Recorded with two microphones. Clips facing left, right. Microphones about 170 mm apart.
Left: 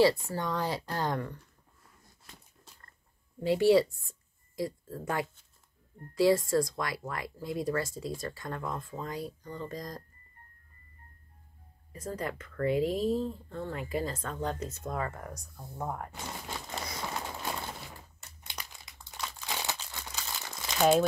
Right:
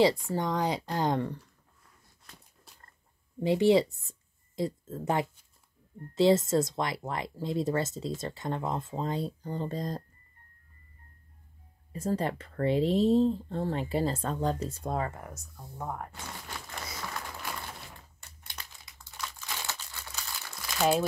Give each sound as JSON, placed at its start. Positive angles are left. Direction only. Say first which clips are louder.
{"t": 0.0, "sound": "speech", "louder": "even", "side_deg": -20}
{"t": 3.4, "sound": "speech", "louder": "even", "side_deg": -20}
{"t": 11.9, "sound": "speech", "louder": "right 6 dB", "side_deg": -30}
{"t": 15.0, "sound": "speech", "louder": "even", "side_deg": -5}
{"t": 16.4, "sound": "crumpling", "louder": "left 3 dB", "side_deg": 25}